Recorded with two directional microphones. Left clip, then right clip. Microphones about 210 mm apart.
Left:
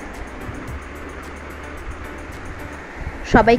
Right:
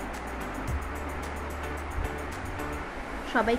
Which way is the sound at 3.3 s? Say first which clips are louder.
Left 13 dB; 35° left (ahead or behind).